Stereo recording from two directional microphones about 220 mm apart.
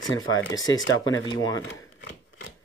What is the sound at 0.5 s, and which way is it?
Speech, 15° left (ahead or behind).